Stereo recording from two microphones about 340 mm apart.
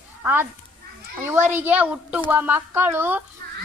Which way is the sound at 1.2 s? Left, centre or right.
Centre.